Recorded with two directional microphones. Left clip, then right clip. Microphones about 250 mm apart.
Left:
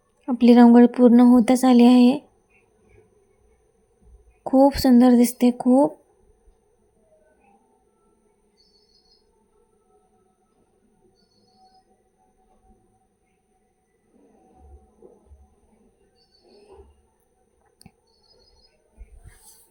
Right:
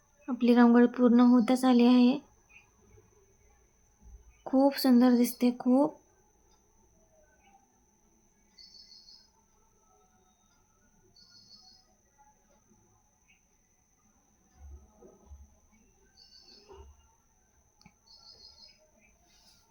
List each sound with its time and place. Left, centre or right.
0.3 s speech: left
4.4 s speech: centre